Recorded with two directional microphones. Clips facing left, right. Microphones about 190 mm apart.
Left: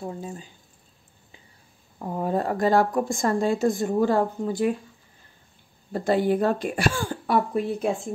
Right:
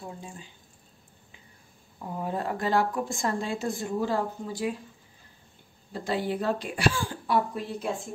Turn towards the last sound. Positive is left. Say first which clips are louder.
# left 7 dB
turn(degrees=55)  # may be behind; listen again after turning